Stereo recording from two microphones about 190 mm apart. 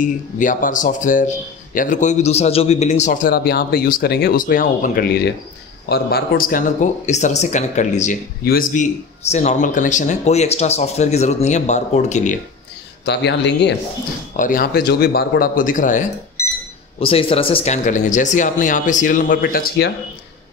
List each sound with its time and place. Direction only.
0.0 s speech: 45° left (ahead or behind)
9.2 s speech: 35° left (ahead or behind)
13.0 s speech: 65° left (ahead or behind)
14.3 s speech: 45° left (ahead or behind)
16.4 s cash register: 15° left (ahead or behind)
17.0 s speech: 30° left (ahead or behind); by 19.9 s 50° left (ahead or behind)